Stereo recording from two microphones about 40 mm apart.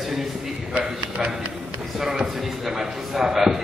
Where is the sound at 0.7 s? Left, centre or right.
Right.